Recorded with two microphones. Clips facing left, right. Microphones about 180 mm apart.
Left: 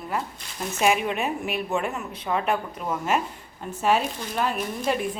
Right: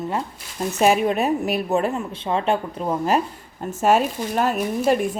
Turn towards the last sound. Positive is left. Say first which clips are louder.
# right 6 dB
turn(degrees=-45)  # may be behind; listen again after turning